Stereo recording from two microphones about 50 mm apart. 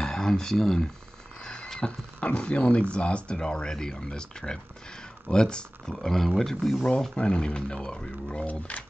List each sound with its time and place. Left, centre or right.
0.0 s speech: centre
1.4 s a sound: centre
1.8 s speech: left
5.9 s speech: centre
7.2 s speech: centre